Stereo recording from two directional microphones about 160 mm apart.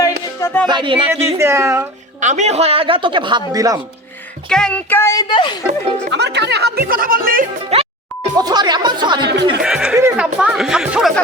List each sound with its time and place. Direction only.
0.3 s music: 15° left (ahead or behind)
0.7 s speech: 30° right (ahead or behind)
1.1 s a woman's voice: 15° right (ahead or behind)
2.2 s a man's voice: 45° right (ahead or behind); by 3.8 s 20° right (ahead or behind)
4.4 s a sound: 5° left (ahead or behind)
5.3 s speech: 30° left (ahead or behind)
6.1 s speech: 90° right; by 7.4 s 60° right (ahead or behind)
7.7 s music: 40° right (ahead or behind)
8.4 s speech: 25° right (ahead or behind)
9.2 s speech: 90° right
9.6 s speech: 5° right (ahead or behind)